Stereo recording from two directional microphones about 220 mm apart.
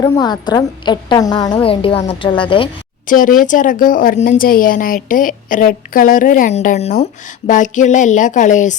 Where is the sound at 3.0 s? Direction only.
40° left (ahead or behind).